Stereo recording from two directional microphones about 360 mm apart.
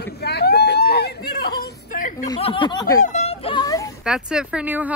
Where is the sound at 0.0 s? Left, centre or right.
Left.